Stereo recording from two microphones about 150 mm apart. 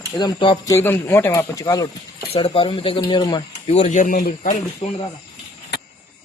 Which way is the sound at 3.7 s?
50° left (ahead or behind).